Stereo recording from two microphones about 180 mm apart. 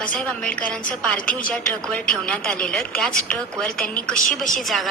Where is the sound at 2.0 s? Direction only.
5° left (ahead or behind).